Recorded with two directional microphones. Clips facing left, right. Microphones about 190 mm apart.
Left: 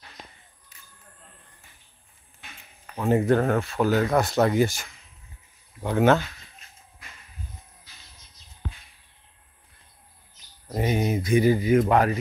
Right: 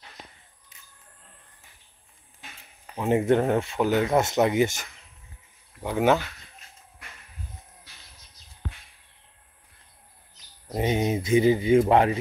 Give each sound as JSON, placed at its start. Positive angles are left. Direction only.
{"t": 0.7, "sound": "a sound", "side_deg": -20}
{"t": 2.9, "sound": "speech", "side_deg": -20}
{"t": 5.8, "sound": "speech", "side_deg": -5}
{"t": 10.8, "sound": "speech", "side_deg": -20}